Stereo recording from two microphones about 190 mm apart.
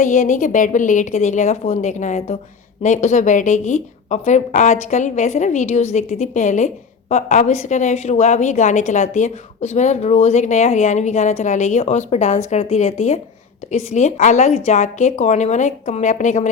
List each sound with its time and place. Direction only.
0.0 s a woman's voice: 40° left (ahead or behind)